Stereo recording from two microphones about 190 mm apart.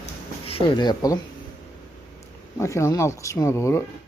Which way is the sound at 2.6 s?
15° left (ahead or behind).